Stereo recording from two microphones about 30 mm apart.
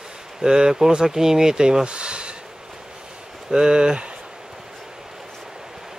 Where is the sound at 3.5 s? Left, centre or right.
Right.